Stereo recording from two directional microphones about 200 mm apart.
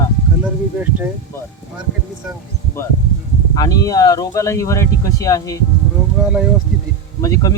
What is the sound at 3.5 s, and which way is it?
Speech, 20° left (ahead or behind).